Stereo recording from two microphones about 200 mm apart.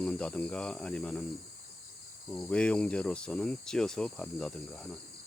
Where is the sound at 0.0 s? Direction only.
5° left (ahead or behind).